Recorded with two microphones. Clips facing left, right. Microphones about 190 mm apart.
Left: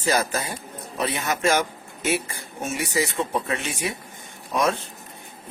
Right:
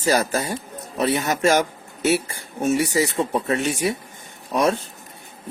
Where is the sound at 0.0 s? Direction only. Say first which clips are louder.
Right 3 dB; 40° right (ahead or behind).